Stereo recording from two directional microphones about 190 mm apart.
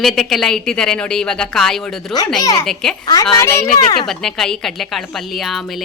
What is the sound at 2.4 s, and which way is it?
A woman's voice, 20° left (ahead or behind).